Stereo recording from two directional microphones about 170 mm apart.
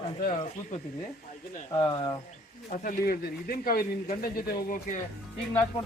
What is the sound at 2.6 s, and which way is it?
Speech, 50° left (ahead or behind).